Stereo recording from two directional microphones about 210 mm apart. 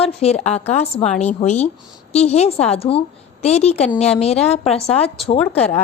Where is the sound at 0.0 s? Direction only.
30° left (ahead or behind).